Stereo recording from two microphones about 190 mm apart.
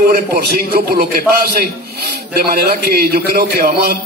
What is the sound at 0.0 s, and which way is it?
A man's voice, 55° right (ahead or behind).